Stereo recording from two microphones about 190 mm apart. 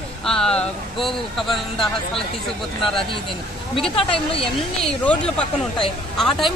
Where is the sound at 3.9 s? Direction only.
30° left (ahead or behind).